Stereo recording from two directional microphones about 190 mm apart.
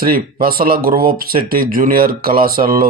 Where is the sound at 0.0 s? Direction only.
50° right (ahead or behind).